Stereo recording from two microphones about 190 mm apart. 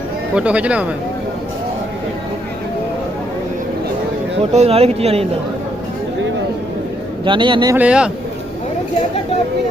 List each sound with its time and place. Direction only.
0.3 s speech: 5° right (ahead or behind)
4.5 s speech: 30° right (ahead or behind)
7.3 s a man's voice: 25° right (ahead or behind)
7.8 s speech: 5° right (ahead or behind)